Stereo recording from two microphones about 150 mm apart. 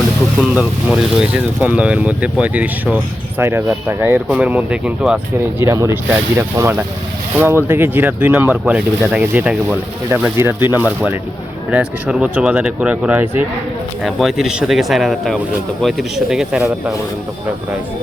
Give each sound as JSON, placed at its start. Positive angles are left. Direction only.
{"t": 0.3, "sound": "speech", "side_deg": -10}